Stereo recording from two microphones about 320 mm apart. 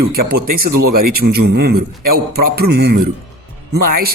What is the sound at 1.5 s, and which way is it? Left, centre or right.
Speech, right.